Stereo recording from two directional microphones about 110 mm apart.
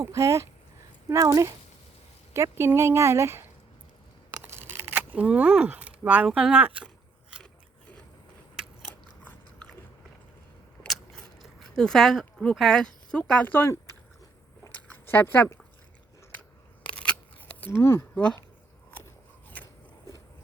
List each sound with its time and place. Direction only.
0.0 s speech: 30° right (ahead or behind)
4.4 s a sound: 20° right (ahead or behind)
6.2 s speech: 5° right (ahead or behind)
10.8 s biting: centre (ahead or behind)
11.8 s speech: 5° left (ahead or behind)
14.8 s a sound: 20° left (ahead or behind)
17.6 s speech: 20° left (ahead or behind)
18.1 s speech: 10° left (ahead or behind)